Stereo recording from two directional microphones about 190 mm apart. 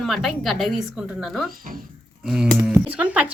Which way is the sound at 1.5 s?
50° right (ahead or behind).